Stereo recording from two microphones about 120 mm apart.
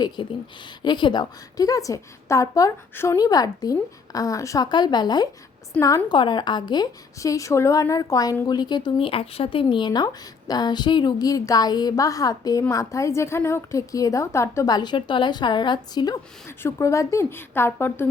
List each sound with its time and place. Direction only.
0.2 s a woman's voice: 45° left (ahead or behind); by 3.2 s 20° left (ahead or behind)
3.2 s a woman's voice: 30° left (ahead or behind)
6.1 s a woman's voice: 40° left (ahead or behind)
16.6 s a woman's voice: 25° left (ahead or behind)